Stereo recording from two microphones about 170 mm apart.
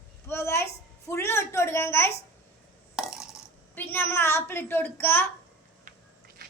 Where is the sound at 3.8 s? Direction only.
10° left (ahead or behind).